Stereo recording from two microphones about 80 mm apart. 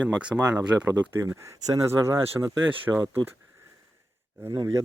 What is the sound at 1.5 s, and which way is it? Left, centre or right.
Speech, right.